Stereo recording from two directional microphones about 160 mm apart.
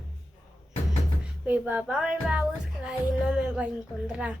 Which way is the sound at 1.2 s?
10° right (ahead or behind).